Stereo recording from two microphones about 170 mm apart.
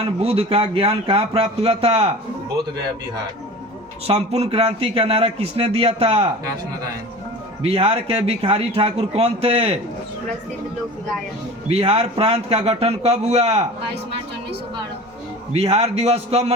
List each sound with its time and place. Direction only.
0.2 s speech: 35° right (ahead or behind)
4.0 s speech: 35° right (ahead or behind)
7.6 s speech: 35° right (ahead or behind)
11.7 s speech: 35° right (ahead or behind)
15.5 s speech: 35° right (ahead or behind)